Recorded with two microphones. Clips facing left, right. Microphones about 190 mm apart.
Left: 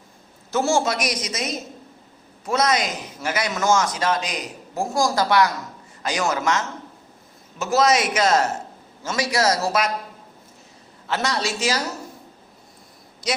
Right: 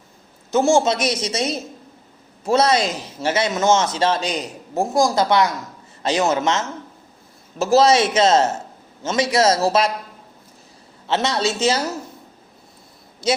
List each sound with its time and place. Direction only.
0.5 s a man's voice: 20° right (ahead or behind)
11.0 s a man's voice: 25° right (ahead or behind)
13.2 s a man's voice: 25° right (ahead or behind)